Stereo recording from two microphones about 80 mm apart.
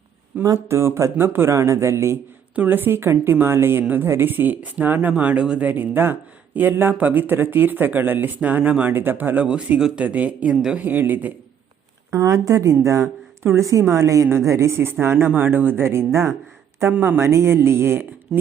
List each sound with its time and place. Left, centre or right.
0.3 s speech: centre
0.7 s speech: right
2.6 s speech: right
12.1 s speech: right